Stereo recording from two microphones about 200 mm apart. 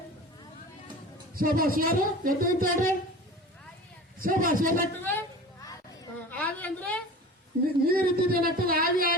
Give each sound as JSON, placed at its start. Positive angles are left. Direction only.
{"t": 1.4, "sound": "speech", "side_deg": -45}
{"t": 4.2, "sound": "speech", "side_deg": -45}
{"t": 4.9, "sound": "a woman's voice", "side_deg": 10}
{"t": 6.3, "sound": "a woman's voice", "side_deg": 10}
{"t": 7.9, "sound": "speech", "side_deg": -50}